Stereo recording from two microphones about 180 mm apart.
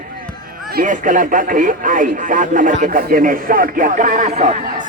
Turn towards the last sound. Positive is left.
turn(degrees=-40)  # may be behind; listen again after turning